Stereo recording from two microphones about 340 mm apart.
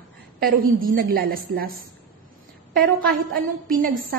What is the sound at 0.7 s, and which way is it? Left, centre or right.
Speech, right.